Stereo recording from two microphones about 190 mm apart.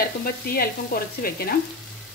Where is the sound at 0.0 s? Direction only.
50° left (ahead or behind).